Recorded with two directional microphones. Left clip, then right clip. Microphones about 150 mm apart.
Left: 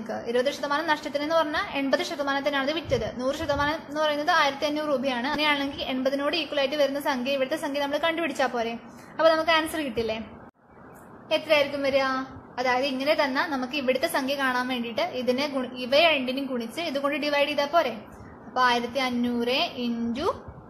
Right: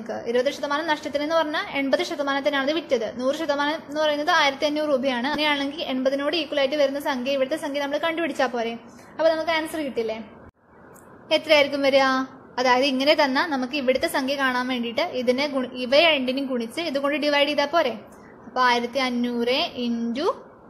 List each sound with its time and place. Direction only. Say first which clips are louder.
0.1 s a woman's voice: right 2 dB; 20° right (ahead or behind)
11.2 s a woman's voice: right 4 dB; 35° right (ahead or behind)